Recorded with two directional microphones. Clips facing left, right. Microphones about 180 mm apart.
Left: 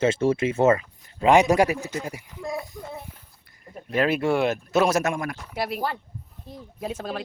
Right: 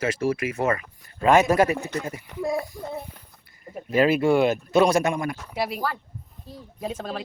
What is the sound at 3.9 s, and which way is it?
Speech, centre (ahead or behind).